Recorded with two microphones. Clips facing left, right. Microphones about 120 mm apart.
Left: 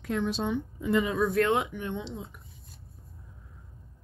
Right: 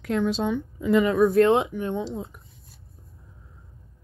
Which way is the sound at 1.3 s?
25° right (ahead or behind).